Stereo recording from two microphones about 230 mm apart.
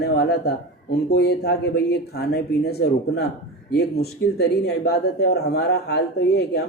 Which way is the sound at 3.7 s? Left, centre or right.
Left.